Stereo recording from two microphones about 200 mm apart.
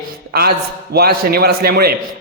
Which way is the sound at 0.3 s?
50° right (ahead or behind).